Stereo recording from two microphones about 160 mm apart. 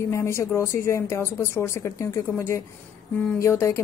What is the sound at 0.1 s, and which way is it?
Speech, 15° left (ahead or behind).